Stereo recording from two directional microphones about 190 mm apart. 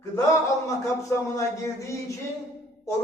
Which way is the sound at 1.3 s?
15° left (ahead or behind).